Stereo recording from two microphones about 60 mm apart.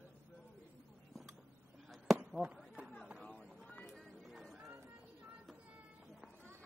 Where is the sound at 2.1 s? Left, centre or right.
Centre.